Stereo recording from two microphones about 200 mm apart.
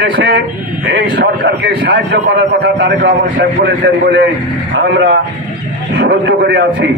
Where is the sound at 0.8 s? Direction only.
60° right (ahead or behind).